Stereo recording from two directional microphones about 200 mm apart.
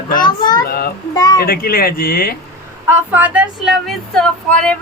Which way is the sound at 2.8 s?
10° right (ahead or behind).